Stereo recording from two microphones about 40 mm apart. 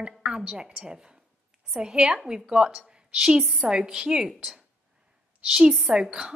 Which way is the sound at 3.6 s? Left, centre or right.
Centre.